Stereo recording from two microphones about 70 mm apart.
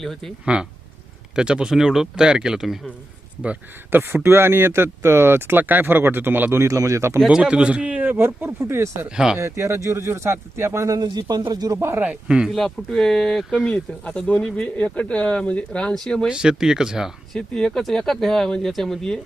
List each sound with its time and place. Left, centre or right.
0.0 s speech: centre
0.4 s speech: centre
3.4 s a man's voice: centre
4.0 s speech: right
6.6 s speech: right
7.3 s a man's voice: centre; by 9.0 s right
9.0 s speech: centre
9.4 s speech: right
10.8 s speech: right
11.9 s speech: centre
12.5 s speech: centre
16.3 s speech: centre
17.3 s speech: centre